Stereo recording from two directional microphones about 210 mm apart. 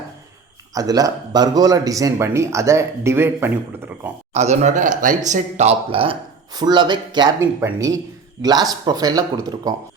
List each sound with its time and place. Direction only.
0.7 s speech: 15° right (ahead or behind)
4.4 s speech: 35° right (ahead or behind); by 9.7 s 20° right (ahead or behind)